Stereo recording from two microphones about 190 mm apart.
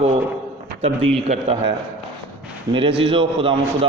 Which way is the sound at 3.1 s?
30° right (ahead or behind).